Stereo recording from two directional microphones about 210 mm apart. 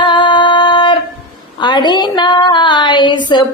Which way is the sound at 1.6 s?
20° left (ahead or behind).